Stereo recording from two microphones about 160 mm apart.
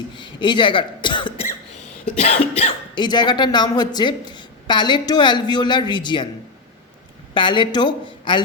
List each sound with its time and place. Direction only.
0.2 s speech: 30° left (ahead or behind)
2.1 s cough: 45° left (ahead or behind)
2.9 s speech: 30° left (ahead or behind)
7.3 s speech: 30° left (ahead or behind)